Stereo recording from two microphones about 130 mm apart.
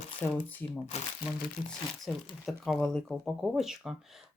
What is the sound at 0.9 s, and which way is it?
Speech, 60° left (ahead or behind).